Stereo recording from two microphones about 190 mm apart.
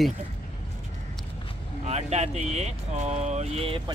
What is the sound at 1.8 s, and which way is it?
Speech, 35° right (ahead or behind).